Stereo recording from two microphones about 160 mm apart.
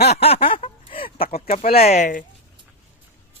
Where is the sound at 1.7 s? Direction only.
40° left (ahead or behind).